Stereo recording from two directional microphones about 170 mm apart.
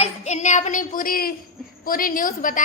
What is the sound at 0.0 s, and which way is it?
A woman's voice, 45° left (ahead or behind).